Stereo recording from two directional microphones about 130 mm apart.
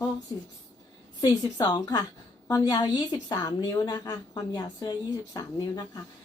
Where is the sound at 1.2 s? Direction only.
30° left (ahead or behind).